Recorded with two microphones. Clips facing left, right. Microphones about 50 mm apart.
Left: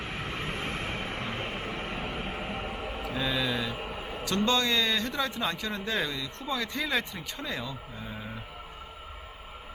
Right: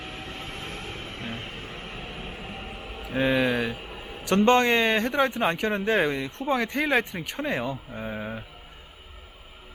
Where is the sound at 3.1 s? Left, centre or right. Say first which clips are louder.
Right 8 dB; right.